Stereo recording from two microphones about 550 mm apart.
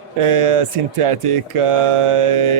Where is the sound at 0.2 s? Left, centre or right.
Right.